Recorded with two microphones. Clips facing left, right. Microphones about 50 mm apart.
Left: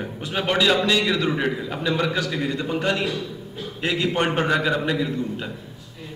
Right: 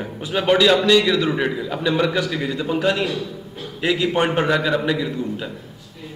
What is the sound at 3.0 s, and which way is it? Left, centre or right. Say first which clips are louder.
Speech: right 2 dB; right.